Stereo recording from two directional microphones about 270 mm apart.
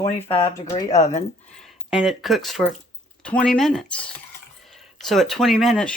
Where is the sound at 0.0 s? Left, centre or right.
Centre.